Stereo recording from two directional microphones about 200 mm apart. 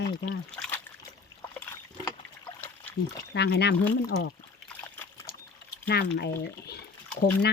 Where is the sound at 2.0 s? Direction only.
10° left (ahead or behind).